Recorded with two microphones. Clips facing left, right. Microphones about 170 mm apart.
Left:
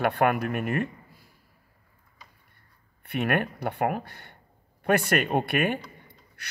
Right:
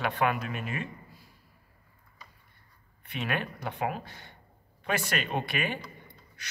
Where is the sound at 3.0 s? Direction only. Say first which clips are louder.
Left 7 dB; 60° left (ahead or behind).